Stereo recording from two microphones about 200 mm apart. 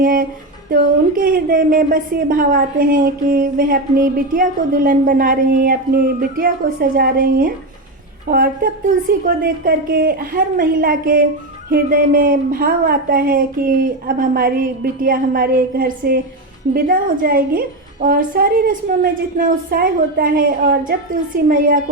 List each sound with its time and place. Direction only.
0.0 s a woman's voice: 45° right (ahead or behind)